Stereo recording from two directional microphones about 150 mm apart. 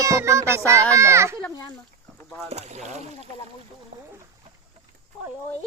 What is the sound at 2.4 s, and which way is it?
Speech, 45° right (ahead or behind).